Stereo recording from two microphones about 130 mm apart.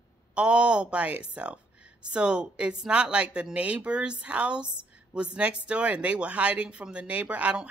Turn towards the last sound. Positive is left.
turn(degrees=-10)  # may be behind; listen again after turning